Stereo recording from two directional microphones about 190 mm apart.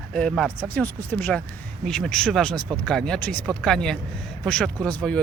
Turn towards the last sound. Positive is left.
turn(degrees=5)  # may be behind; listen again after turning